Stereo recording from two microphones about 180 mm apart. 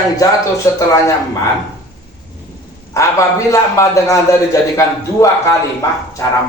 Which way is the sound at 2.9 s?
15° left (ahead or behind).